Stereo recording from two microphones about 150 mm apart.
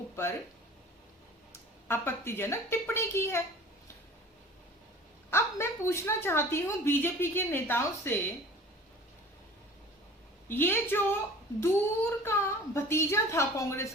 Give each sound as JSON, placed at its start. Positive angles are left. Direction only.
{"t": 1.9, "sound": "a woman's voice", "side_deg": 15}
{"t": 5.3, "sound": "a woman's voice", "side_deg": 15}
{"t": 10.5, "sound": "a woman's voice", "side_deg": 15}